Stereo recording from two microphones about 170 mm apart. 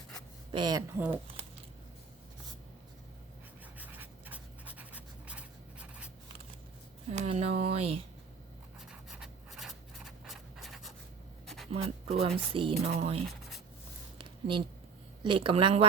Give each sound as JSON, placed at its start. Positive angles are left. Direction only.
{"t": 0.5, "sound": "speech", "side_deg": -25}
{"t": 3.8, "sound": "writing", "side_deg": -10}
{"t": 7.1, "sound": "speech", "side_deg": -40}
{"t": 8.9, "sound": "scratch", "side_deg": -5}
{"t": 11.4, "sound": "a sound", "side_deg": 0}
{"t": 11.7, "sound": "speech", "side_deg": -35}
{"t": 14.2, "sound": "a sound", "side_deg": -30}
{"t": 15.2, "sound": "speech", "side_deg": -30}